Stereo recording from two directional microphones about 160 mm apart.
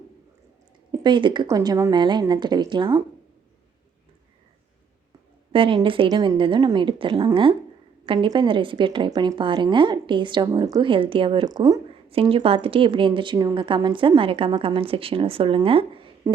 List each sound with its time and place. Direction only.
0.9 s a woman's voice: 30° right (ahead or behind)
5.5 s a woman's voice: 35° right (ahead or behind)
12.1 s a woman's voice: 35° right (ahead or behind)
16.2 s speech: 20° right (ahead or behind)